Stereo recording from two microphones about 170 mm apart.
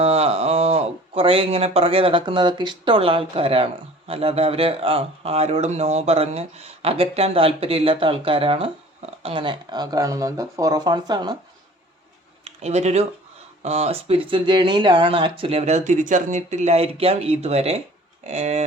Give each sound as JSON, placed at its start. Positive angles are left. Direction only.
{"t": 0.0, "sound": "speech", "side_deg": -35}
{"t": 12.5, "sound": "speech", "side_deg": -40}